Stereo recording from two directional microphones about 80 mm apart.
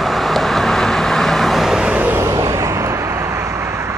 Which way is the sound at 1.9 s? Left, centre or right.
Right.